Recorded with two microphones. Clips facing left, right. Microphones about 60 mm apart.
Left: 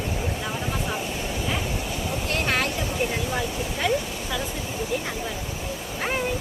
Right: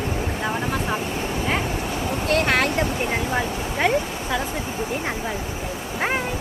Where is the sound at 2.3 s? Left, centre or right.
Right.